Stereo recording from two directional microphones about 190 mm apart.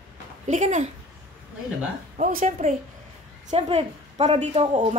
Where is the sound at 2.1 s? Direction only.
40° right (ahead or behind).